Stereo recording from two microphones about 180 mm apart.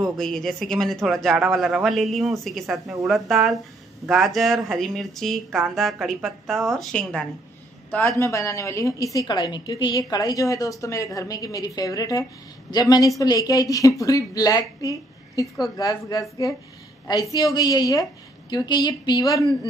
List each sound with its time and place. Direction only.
0.0 s speech: centre (ahead or behind)
8.2 s a woman's voice: 15° left (ahead or behind)